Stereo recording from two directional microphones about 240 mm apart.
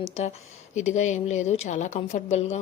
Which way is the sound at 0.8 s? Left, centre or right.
Left.